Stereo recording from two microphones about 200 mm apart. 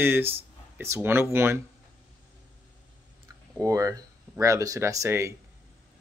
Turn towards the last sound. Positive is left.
turn(degrees=-15)  # may be behind; listen again after turning